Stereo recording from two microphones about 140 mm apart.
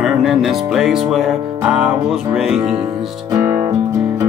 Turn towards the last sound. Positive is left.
turn(degrees=-20)  # may be behind; listen again after turning